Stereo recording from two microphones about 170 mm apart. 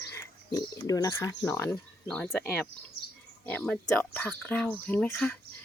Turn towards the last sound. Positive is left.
turn(degrees=5)  # may be behind; listen again after turning